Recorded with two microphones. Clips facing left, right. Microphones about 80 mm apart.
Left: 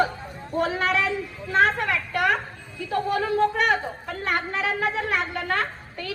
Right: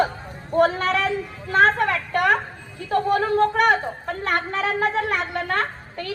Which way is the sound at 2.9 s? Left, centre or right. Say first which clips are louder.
Right 4 dB; right.